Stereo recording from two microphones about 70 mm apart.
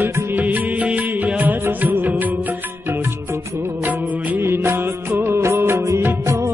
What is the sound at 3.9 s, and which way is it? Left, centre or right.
Music of bollywood, right.